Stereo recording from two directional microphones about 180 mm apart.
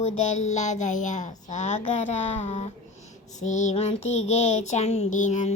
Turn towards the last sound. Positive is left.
turn(degrees=45)  # may be behind; listen again after turning